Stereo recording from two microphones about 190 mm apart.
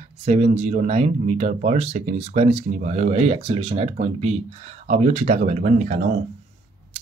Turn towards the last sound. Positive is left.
turn(degrees=-40)  # may be behind; listen again after turning